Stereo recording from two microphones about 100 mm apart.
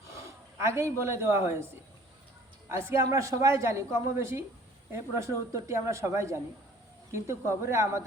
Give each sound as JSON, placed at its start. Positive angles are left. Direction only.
{"t": 0.1, "sound": "a man's voice", "side_deg": -30}